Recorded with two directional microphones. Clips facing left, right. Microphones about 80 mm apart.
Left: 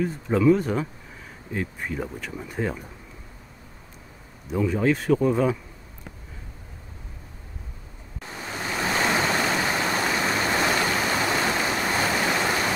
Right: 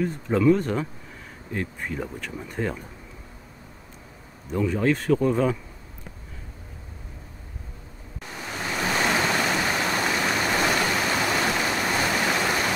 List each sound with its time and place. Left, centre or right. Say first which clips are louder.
0.0 s speech: even; centre
4.5 s speech: even; centre
8.2 s waves: even; left
9.0 s stream: even; left
12.4 s waterfall: even; centre